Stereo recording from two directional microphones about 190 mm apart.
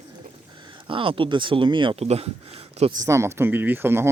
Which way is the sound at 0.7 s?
25° right (ahead or behind).